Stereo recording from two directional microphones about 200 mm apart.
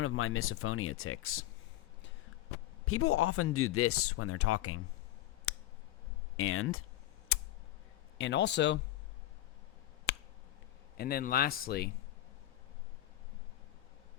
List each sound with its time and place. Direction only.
0.0 s speech: 90° left
2.8 s speech: 90° left
5.5 s a sound: 90° left
6.3 s speech: 90° left
7.3 s a sound: 90° left
8.2 s a man's voice: 60° left (ahead or behind)
10.1 s finger snapping: 65° left (ahead or behind)
10.9 s speech: 50° left (ahead or behind)